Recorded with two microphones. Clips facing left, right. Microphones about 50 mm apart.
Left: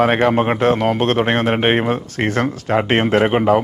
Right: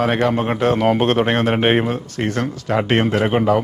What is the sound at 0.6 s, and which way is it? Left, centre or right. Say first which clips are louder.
Speech: left 2 dB; centre.